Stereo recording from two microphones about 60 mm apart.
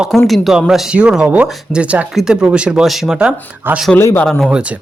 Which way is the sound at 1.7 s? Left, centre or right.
Right.